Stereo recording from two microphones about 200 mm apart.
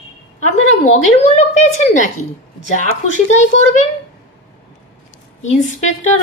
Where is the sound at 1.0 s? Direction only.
35° left (ahead or behind).